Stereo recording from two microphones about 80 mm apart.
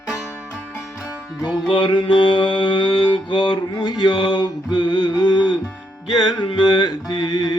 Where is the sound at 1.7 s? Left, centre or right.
Left.